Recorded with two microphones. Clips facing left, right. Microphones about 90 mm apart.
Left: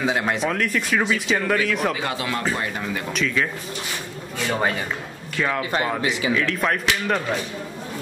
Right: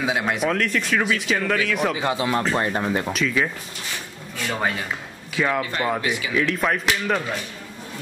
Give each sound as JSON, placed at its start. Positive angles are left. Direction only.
{"t": 0.0, "sound": "speech", "side_deg": -5}
{"t": 2.0, "sound": "speech", "side_deg": -20}
{"t": 3.1, "sound": "speech", "side_deg": 0}
{"t": 4.6, "sound": "speech", "side_deg": 0}
{"t": 6.0, "sound": "speech", "side_deg": 25}
{"t": 6.3, "sound": "speech", "side_deg": -5}